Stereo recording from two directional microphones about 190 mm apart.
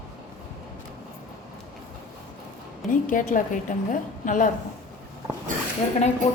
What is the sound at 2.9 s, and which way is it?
A woman's voice, 45° left (ahead or behind).